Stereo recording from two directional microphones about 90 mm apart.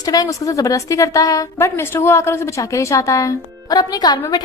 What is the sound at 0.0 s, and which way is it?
A woman's voice, 40° left (ahead or behind).